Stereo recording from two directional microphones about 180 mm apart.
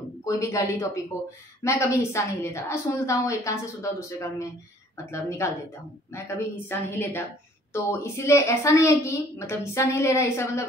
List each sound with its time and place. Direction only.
0.2 s a woman's voice: 15° left (ahead or behind)